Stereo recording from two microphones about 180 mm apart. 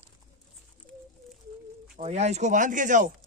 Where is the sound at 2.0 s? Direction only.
40° right (ahead or behind).